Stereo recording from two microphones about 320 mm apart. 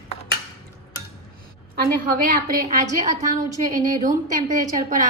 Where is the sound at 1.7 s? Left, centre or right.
Right.